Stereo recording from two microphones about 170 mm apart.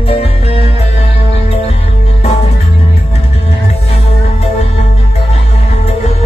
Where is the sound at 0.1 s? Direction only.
35° left (ahead or behind).